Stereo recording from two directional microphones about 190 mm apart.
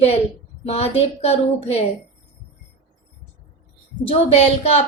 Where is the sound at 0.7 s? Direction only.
30° left (ahead or behind).